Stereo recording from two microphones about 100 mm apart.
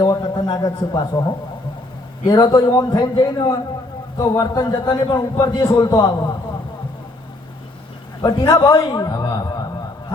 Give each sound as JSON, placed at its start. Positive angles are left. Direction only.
{"t": 0.0, "sound": "a man's voice", "side_deg": 45}
{"t": 8.2, "sound": "a man's voice", "side_deg": 40}